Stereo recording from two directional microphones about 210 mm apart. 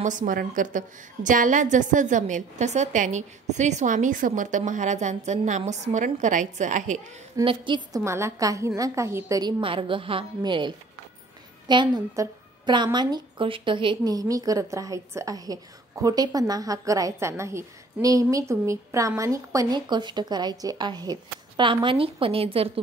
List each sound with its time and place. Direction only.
0.0 s a woman's voice: 35° right (ahead or behind)
7.4 s a woman's voice: 20° right (ahead or behind)